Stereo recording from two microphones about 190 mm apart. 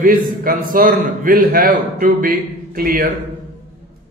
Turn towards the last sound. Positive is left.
turn(degrees=-50)  # may be behind; listen again after turning